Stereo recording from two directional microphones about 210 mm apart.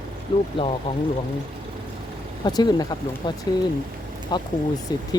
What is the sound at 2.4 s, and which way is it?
Speech, 20° left (ahead or behind).